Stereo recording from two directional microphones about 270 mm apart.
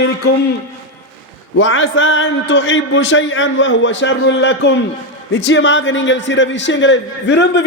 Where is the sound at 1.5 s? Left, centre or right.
Left.